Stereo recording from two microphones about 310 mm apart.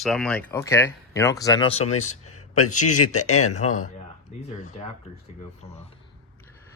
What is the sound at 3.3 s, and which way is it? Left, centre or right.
Speech, left.